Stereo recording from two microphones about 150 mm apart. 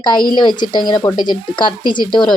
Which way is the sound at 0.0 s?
30° left (ahead or behind).